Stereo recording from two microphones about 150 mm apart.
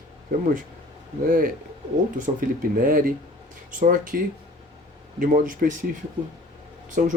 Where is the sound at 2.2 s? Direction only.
65° right (ahead or behind).